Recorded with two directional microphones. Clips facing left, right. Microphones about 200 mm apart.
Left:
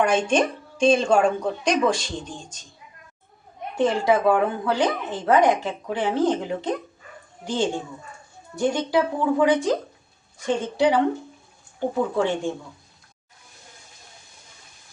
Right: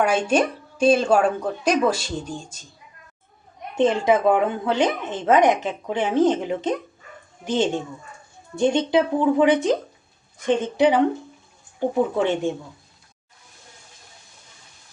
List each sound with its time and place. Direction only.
0.0 s speech: 10° right (ahead or behind)
3.8 s speech: 20° right (ahead or behind)
12.1 s speech: 20° right (ahead or behind)